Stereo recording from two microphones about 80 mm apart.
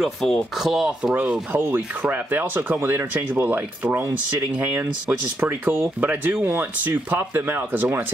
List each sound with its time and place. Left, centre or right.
0.0 s speech: centre
1.1 s rub: right
4.6 s speech: centre
5.4 s rub: right